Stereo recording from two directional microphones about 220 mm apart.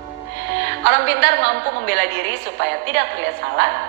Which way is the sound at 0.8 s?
50° right (ahead or behind).